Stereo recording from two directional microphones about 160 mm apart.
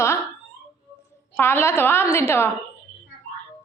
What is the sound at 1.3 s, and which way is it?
A woman's voice, 15° left (ahead or behind).